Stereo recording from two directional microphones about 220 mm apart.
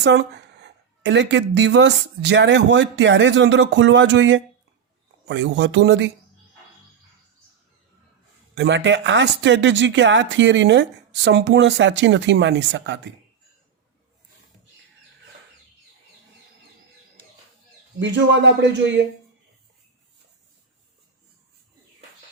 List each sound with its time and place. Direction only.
0.0 s speech: 50° right (ahead or behind)
8.5 s speech: 55° right (ahead or behind)
18.0 s speech: 55° right (ahead or behind)